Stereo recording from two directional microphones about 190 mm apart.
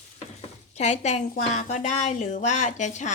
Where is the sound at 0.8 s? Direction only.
35° left (ahead or behind).